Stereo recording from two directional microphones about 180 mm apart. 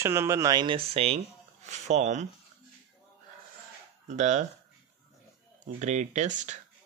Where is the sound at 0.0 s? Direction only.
15° right (ahead or behind); by 2.2 s 40° right (ahead or behind).